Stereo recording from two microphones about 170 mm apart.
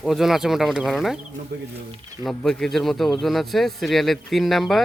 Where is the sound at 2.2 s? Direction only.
Centre (ahead or behind).